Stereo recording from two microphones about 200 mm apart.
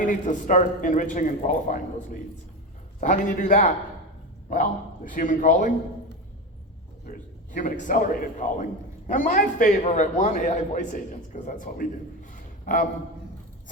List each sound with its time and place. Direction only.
0.0 s a man's voice: 40° left (ahead or behind)
3.0 s a man's voice: 40° left (ahead or behind)
7.0 s a man's voice: 40° left (ahead or behind)